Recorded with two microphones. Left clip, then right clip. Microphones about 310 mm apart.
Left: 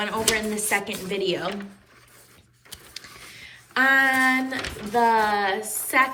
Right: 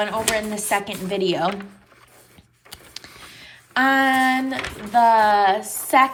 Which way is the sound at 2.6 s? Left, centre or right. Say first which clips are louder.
Right 2 dB; centre.